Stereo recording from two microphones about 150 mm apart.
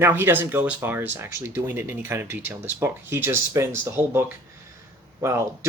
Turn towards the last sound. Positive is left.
turn(degrees=-20)  # may be behind; listen again after turning